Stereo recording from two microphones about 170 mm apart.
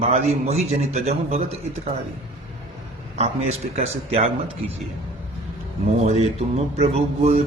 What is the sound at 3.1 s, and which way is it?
A man's voice, 40° right (ahead or behind).